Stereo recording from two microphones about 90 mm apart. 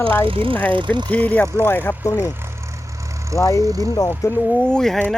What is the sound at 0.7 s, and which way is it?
Speech, 60° right (ahead or behind).